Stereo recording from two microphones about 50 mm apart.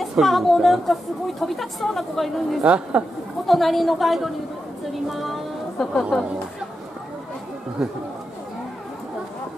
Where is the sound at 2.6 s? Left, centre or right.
Right.